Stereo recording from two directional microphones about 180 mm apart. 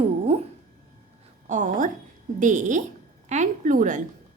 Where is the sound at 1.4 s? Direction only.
45° right (ahead or behind).